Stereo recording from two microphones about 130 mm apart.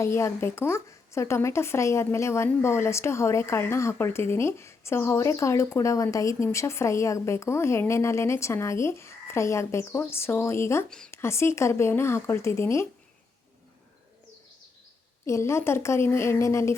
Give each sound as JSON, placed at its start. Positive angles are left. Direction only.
{"t": 0.0, "sound": "speech", "side_deg": 20}
{"t": 10.8, "sound": "speech", "side_deg": 5}
{"t": 11.1, "sound": "speech", "side_deg": 20}
{"t": 15.3, "sound": "speech", "side_deg": 20}